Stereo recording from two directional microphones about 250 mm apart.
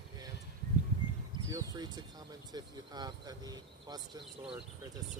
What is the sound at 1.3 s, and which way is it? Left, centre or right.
Speech, centre.